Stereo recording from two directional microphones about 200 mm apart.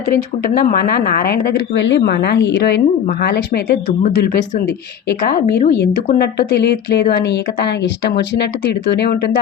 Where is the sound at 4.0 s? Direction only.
40° left (ahead or behind).